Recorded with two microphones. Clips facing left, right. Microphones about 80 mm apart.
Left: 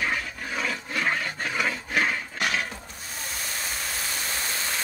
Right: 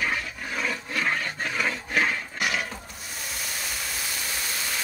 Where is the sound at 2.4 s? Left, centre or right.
Left.